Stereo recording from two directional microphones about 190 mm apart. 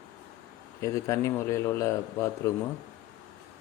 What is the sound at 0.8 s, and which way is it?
A man's voice, 15° left (ahead or behind).